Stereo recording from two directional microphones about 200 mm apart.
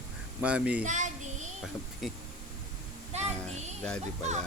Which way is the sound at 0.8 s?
35° right (ahead or behind).